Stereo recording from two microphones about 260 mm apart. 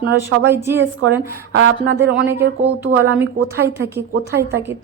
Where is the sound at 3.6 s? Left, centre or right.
Centre.